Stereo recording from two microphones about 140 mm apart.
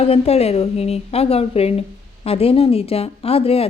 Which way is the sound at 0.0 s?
45° left (ahead or behind).